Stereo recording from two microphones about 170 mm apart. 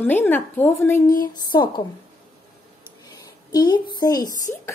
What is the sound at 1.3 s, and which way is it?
Speech, 25° left (ahead or behind).